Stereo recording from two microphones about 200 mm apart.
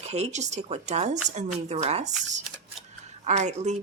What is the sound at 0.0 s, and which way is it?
Speech, 35° right (ahead or behind).